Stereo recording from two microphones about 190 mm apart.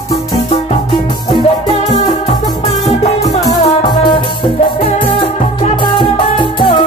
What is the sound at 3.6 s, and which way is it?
Music, 25° left (ahead or behind).